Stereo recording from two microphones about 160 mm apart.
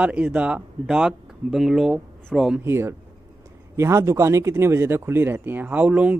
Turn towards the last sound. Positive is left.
turn(degrees=-10)  # may be behind; listen again after turning